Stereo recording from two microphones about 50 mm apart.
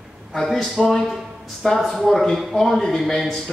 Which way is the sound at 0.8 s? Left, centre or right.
Centre.